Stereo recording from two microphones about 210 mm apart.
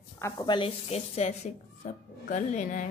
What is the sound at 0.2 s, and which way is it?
A woman's voice, 20° left (ahead or behind).